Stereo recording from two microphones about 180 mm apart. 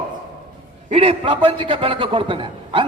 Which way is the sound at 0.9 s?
35° right (ahead or behind).